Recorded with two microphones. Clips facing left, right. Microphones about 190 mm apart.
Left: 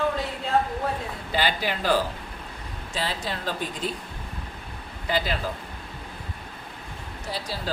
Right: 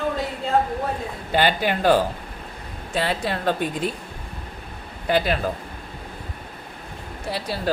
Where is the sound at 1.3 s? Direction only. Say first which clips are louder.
Right 6 dB; 55° right (ahead or behind).